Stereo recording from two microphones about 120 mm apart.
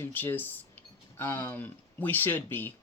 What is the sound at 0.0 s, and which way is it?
Speech, 15° left (ahead or behind).